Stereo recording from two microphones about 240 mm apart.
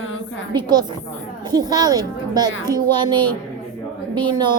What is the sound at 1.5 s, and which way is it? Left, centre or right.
A woman's voice, centre.